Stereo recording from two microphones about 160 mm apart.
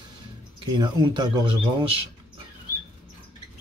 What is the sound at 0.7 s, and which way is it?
Speech, 25° right (ahead or behind).